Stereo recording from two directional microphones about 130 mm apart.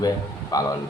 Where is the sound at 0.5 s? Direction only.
30° left (ahead or behind).